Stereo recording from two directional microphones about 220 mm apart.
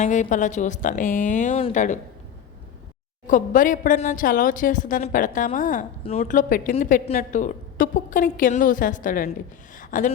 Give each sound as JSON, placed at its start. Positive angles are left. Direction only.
{"t": 0.0, "sound": "a woman's voice", "side_deg": 35}
{"t": 3.2, "sound": "a woman's voice", "side_deg": 35}
{"t": 9.7, "sound": "a sound", "side_deg": 35}